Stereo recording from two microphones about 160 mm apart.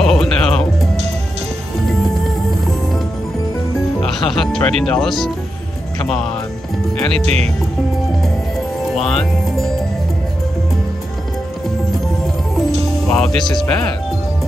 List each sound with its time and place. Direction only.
0.0 s music: 5° left (ahead or behind)
4.0 s music: centre (ahead or behind)
7.2 s speech: 40° right (ahead or behind)
8.2 s music: centre (ahead or behind)
13.1 s speech: 5° left (ahead or behind)